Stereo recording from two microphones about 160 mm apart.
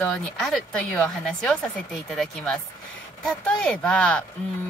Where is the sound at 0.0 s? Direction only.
Centre (ahead or behind).